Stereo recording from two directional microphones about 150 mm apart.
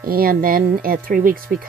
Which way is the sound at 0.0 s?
80° right.